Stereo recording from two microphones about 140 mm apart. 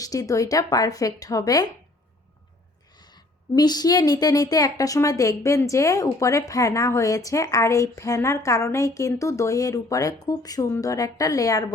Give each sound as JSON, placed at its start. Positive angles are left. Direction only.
{"t": 0.0, "sound": "a woman's voice", "side_deg": 25}
{"t": 3.5, "sound": "a woman's voice", "side_deg": 30}